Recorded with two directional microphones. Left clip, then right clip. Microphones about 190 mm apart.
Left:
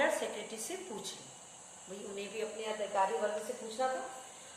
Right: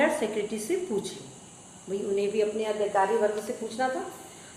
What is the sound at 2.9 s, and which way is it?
Speech, 15° right (ahead or behind).